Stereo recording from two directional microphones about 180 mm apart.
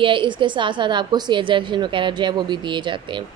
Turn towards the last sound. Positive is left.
turn(degrees=-25)  # may be behind; listen again after turning